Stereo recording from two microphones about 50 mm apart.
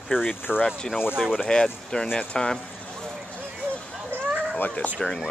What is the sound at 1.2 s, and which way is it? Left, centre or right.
Speech, centre.